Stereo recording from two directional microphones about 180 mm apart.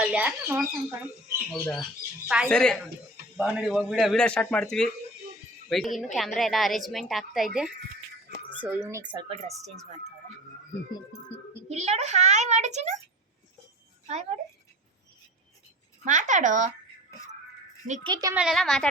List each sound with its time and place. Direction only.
0.0 s speech: 5° right (ahead or behind)
1.6 s speech: 5° left (ahead or behind)
2.2 s speech: 10° right (ahead or behind)
2.5 s speech: 5° left (ahead or behind); by 9.0 s 10° right (ahead or behind)
9.3 s speech: 40° right (ahead or behind)
11.7 s a child's voice: 40° right (ahead or behind)
14.1 s speech: 40° right (ahead or behind)
16.0 s speech: 45° right (ahead or behind)
18.0 s a woman's voice: 20° right (ahead or behind)
18.3 s speech: centre (ahead or behind)